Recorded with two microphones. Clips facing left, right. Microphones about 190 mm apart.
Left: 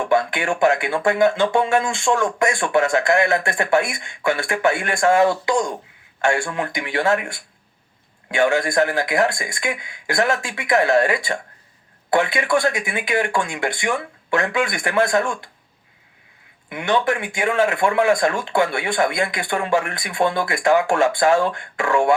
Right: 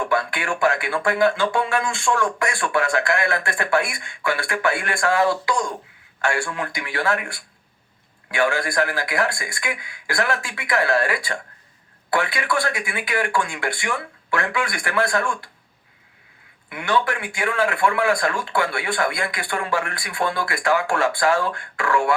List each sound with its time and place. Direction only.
0.1 s speech: 20° left (ahead or behind)
16.6 s speech: 20° left (ahead or behind)